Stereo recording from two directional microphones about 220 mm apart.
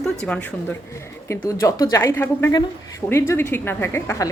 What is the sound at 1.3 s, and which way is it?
Speech, 15° left (ahead or behind).